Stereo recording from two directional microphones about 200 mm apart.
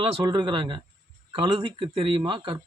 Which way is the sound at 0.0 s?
25° right (ahead or behind).